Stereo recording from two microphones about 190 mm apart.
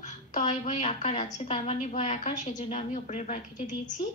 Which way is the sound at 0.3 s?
35° left (ahead or behind).